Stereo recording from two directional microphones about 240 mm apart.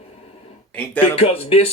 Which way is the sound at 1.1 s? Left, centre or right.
Left.